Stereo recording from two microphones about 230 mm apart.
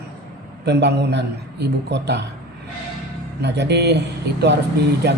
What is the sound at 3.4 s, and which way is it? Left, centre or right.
A man's voice, right.